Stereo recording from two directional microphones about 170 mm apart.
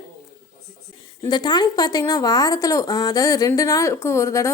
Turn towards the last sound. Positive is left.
turn(degrees=15)  # may be behind; listen again after turning